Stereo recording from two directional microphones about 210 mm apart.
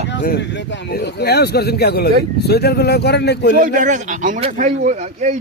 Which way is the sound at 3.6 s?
35° right (ahead or behind).